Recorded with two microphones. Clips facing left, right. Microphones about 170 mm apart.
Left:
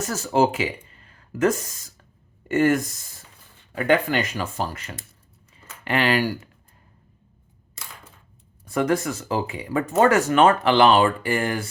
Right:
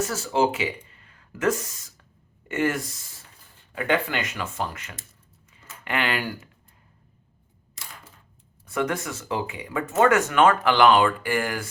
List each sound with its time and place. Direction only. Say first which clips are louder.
0.1 s speech: left 3 dB; 40° left (ahead or behind)
1.0 s a sound: left 3 dB; 35° left (ahead or behind)
2.5 s speech: left 6 dB; 40° left (ahead or behind)
8.7 s speech: left 5 dB; 35° left (ahead or behind)